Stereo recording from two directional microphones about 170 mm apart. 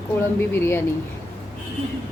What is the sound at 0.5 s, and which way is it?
Speech, 15° left (ahead or behind).